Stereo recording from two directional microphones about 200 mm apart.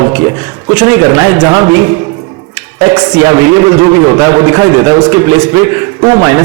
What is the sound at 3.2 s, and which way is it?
A man's voice, 15° right (ahead or behind).